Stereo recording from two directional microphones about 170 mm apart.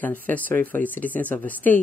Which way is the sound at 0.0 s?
10° left (ahead or behind).